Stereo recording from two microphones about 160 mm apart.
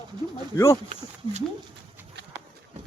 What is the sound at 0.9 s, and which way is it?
Speech, 45° right (ahead or behind).